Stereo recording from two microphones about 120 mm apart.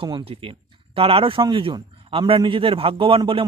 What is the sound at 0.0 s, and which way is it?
A man's voice, 50° right (ahead or behind).